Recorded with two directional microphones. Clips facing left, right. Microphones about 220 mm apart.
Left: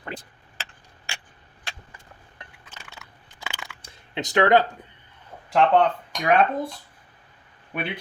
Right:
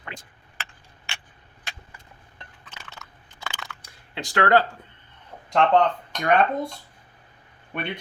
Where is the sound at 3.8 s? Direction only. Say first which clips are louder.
Left 6 dB; 20° left (ahead or behind).